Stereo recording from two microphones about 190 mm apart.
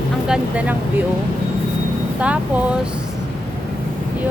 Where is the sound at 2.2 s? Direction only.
5° right (ahead or behind).